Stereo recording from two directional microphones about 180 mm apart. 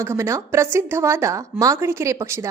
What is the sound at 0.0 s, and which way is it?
A woman's voice, 15° right (ahead or behind).